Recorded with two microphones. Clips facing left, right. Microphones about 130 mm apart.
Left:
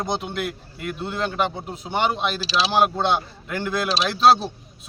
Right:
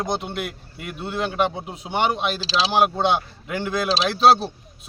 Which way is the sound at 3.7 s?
Centre (ahead or behind).